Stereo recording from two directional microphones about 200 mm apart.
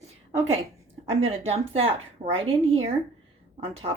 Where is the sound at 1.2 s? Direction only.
30° right (ahead or behind).